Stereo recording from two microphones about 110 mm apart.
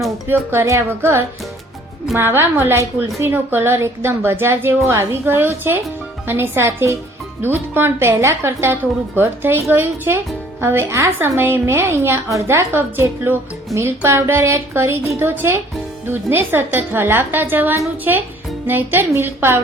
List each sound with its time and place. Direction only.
0.3 s a woman's voice: 25° right (ahead or behind)